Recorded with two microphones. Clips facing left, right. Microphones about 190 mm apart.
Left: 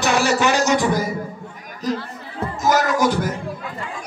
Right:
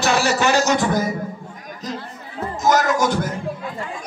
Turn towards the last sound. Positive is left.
turn(degrees=10)  # may be behind; listen again after turning